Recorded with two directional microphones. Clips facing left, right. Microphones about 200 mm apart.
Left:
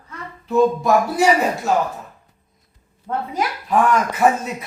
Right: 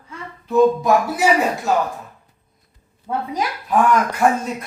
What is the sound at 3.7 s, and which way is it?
Speech, 5° left (ahead or behind).